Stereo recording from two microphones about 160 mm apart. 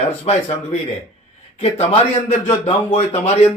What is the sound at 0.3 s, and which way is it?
Speech, 45° left (ahead or behind).